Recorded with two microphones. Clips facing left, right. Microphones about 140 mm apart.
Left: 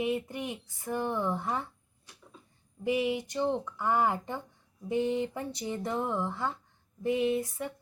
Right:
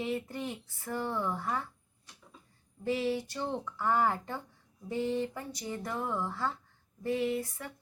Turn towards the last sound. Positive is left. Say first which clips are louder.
# left 4 dB
turn(degrees=20)  # may be behind; listen again after turning